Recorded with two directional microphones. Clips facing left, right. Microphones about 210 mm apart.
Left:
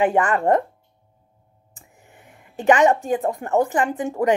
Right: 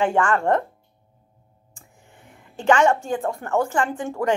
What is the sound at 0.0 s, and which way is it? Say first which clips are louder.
Speech: left 2 dB; 20° left (ahead or behind).